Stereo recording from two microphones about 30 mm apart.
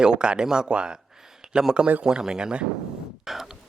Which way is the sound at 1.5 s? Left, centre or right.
Centre.